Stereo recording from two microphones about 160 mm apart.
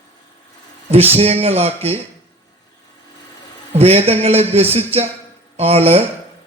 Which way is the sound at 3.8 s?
40° right (ahead or behind).